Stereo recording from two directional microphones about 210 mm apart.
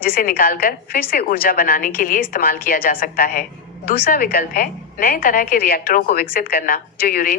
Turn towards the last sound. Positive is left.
turn(degrees=40)  # may be behind; listen again after turning